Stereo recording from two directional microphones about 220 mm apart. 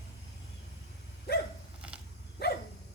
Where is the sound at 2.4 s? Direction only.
45° left (ahead or behind).